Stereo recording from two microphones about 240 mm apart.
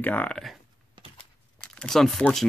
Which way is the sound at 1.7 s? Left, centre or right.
Centre.